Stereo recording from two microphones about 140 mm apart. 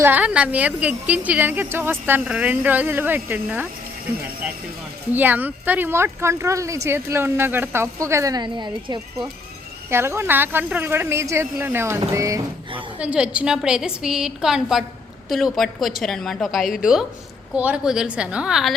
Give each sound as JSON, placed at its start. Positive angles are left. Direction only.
{"t": 0.0, "sound": "speech", "side_deg": -10}
{"t": 5.1, "sound": "speech", "side_deg": -10}
{"t": 9.9, "sound": "speech", "side_deg": -20}
{"t": 13.0, "sound": "a woman's voice", "side_deg": -10}